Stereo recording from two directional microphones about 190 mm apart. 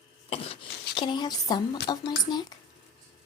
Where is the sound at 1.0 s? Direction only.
25° left (ahead or behind).